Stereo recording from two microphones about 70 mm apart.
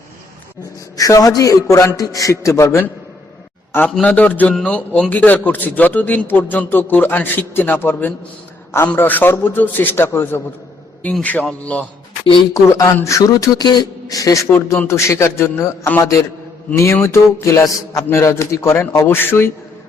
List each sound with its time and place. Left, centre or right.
0.9 s a man's voice: left
2.0 s a man's voice: left
4.0 s a man's voice: left
11.2 s a man's voice: left
12.5 s a man's voice: left
13.7 s speech: left
14.2 s a man's voice: left